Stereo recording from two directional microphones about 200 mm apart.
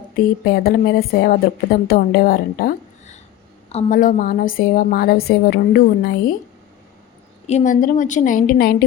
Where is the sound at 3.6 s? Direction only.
35° left (ahead or behind); by 6.1 s 55° left (ahead or behind).